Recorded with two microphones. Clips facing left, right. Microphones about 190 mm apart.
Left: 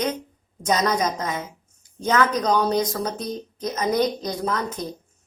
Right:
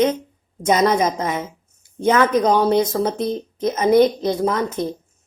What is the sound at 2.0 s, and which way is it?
A woman's voice, 25° right (ahead or behind).